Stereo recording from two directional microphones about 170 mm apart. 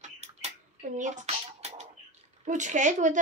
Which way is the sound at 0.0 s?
40° right (ahead or behind).